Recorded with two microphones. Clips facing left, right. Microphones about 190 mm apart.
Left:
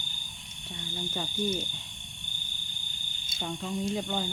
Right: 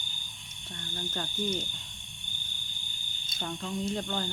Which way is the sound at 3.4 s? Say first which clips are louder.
Left 1 dB; 10° left (ahead or behind).